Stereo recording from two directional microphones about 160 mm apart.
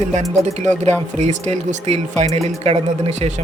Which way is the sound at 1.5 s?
45° right (ahead or behind).